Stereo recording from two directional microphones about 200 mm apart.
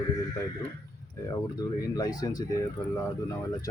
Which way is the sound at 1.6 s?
20° left (ahead or behind).